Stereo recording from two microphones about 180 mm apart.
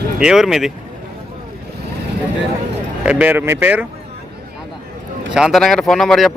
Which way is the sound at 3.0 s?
5° right (ahead or behind).